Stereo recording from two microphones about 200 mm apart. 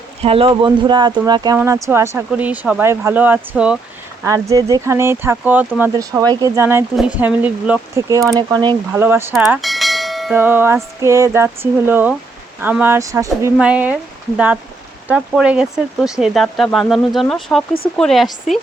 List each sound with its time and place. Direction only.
0.2 s speech: 30° right (ahead or behind); by 3.8 s 5° right (ahead or behind)
4.2 s speech: 15° right (ahead or behind)
8.9 s speech: 10° right (ahead or behind)
9.3 s bell: centre (ahead or behind)
10.3 s speech: 10° right (ahead or behind)